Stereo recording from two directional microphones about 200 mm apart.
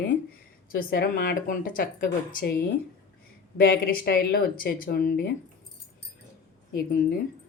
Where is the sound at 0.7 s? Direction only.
45° left (ahead or behind).